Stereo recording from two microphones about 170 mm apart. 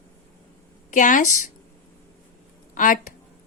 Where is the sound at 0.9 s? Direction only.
50° left (ahead or behind).